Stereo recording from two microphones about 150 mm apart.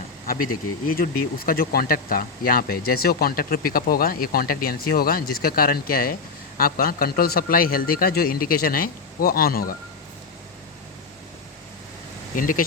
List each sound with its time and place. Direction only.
0.9 s a man's voice: 80° left
12.4 s speech: 65° left (ahead or behind)